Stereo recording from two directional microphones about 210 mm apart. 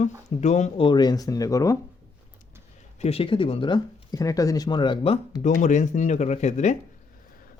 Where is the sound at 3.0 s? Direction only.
30° left (ahead or behind).